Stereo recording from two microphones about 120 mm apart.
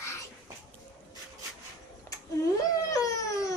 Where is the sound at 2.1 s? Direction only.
20° left (ahead or behind).